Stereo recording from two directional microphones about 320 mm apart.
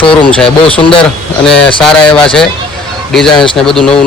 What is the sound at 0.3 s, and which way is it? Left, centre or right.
Speech, centre.